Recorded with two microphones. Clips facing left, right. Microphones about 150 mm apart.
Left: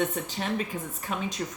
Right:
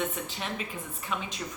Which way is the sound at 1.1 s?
40° left (ahead or behind).